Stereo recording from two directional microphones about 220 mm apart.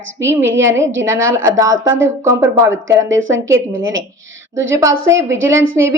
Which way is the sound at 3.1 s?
60° right (ahead or behind).